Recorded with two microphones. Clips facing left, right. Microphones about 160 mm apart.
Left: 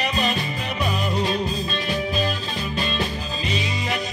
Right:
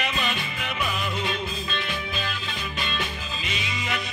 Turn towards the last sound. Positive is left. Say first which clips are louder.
# left 5 dB
turn(degrees=35)  # may be behind; listen again after turning